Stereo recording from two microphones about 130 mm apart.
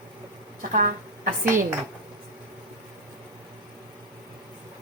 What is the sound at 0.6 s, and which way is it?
Speech, 90° right.